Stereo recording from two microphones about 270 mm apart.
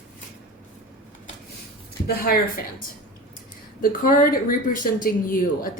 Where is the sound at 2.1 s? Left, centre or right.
Left.